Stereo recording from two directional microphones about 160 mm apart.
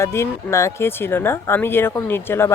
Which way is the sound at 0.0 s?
15° left (ahead or behind).